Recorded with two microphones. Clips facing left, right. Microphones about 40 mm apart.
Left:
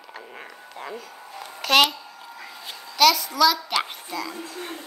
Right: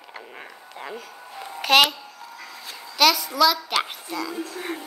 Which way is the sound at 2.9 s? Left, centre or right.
Centre.